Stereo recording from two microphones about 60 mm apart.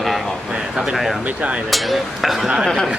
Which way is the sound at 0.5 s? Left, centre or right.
Centre.